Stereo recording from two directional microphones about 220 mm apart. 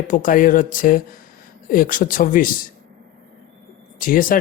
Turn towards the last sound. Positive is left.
turn(degrees=40)  # may be behind; listen again after turning